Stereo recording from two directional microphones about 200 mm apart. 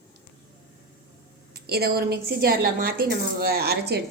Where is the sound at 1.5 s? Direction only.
50° right (ahead or behind).